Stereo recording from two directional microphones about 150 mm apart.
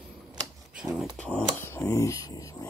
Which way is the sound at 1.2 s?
5° left (ahead or behind).